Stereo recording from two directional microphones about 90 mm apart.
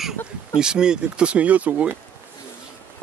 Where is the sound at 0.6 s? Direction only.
10° right (ahead or behind).